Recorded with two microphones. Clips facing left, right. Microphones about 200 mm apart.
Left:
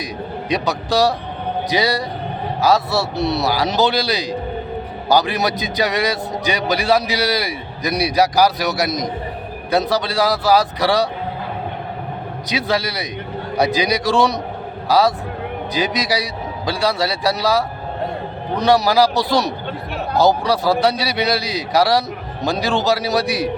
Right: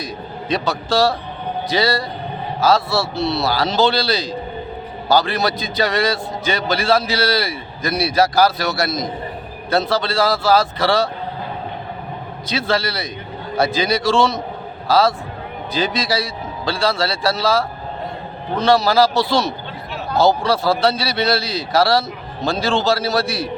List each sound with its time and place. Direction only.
0.5 s a man's voice: 20° left (ahead or behind)
12.5 s a man's voice: 15° left (ahead or behind)